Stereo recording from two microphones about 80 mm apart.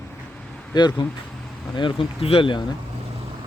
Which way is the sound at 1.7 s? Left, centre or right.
Left.